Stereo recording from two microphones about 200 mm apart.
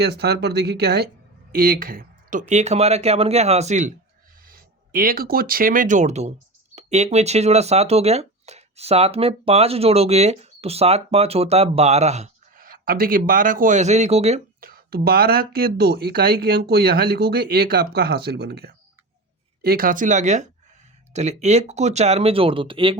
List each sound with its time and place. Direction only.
0.0 s speech: 55° right (ahead or behind); by 14.4 s 30° right (ahead or behind)
14.6 s speech: 50° right (ahead or behind); by 23.0 s 25° right (ahead or behind)